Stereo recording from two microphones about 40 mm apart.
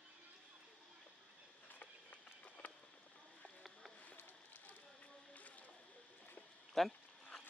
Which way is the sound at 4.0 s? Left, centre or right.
Left.